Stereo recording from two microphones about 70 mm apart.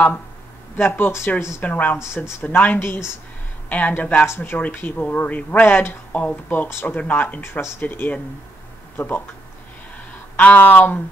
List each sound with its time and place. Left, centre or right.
0.7 s speech: left
1.6 s speech: left
5.7 s speech: left
7.0 s speech: left
10.4 s speech: left